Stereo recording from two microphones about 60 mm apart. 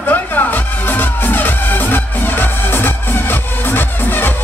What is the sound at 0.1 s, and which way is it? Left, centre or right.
Music, left.